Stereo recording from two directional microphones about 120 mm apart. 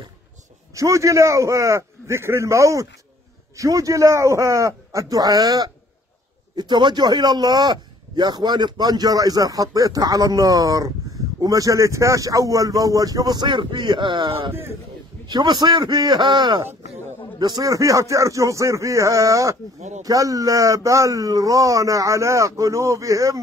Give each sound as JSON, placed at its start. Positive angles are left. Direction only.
{"t": 0.7, "sound": "a man's voice", "side_deg": -25}